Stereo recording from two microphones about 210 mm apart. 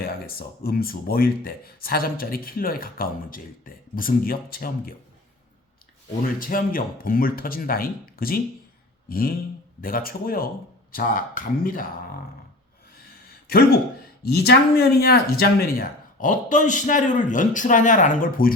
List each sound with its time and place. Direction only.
0.0 s speech: 45° left (ahead or behind)
6.4 s speech: 40° left (ahead or behind)
13.5 s speech: 45° left (ahead or behind)